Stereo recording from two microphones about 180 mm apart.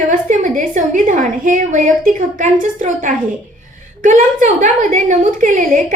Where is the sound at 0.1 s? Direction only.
45° right (ahead or behind).